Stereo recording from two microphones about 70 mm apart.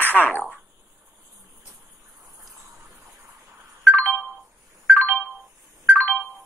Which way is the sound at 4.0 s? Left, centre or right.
Right.